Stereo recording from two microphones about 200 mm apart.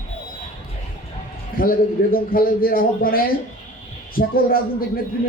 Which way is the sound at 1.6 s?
45° left (ahead or behind).